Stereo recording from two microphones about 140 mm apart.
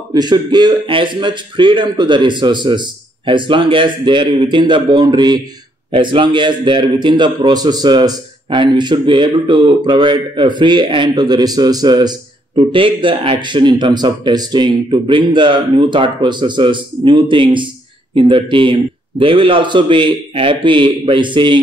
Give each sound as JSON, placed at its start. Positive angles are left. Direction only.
{"t": 0.1, "sound": "a man's voice", "side_deg": -30}